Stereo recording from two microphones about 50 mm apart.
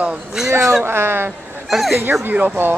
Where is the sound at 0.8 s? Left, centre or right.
Right.